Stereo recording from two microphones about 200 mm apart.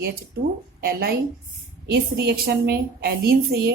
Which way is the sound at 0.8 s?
50° right (ahead or behind).